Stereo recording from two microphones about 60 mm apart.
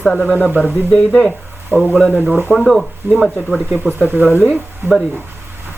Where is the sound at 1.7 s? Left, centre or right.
Right.